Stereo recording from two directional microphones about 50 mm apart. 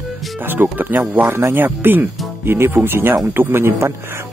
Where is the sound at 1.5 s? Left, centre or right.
Right.